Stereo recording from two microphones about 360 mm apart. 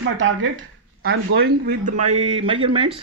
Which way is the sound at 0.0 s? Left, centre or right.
Right.